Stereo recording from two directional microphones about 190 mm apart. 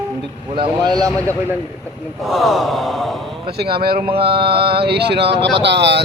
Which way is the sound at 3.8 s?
55° right (ahead or behind).